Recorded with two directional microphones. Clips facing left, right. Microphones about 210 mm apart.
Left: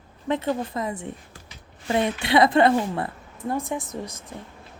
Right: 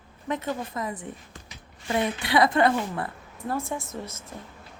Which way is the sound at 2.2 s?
25° left (ahead or behind).